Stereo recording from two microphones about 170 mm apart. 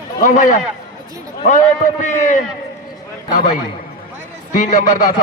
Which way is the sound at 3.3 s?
50° left (ahead or behind).